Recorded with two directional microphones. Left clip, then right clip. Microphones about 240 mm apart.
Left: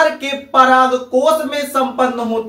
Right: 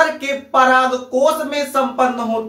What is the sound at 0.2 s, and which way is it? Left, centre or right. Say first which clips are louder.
Speech: left 2 dB; centre.